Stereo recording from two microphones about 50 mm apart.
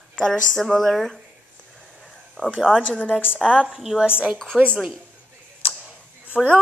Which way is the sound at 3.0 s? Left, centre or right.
Centre.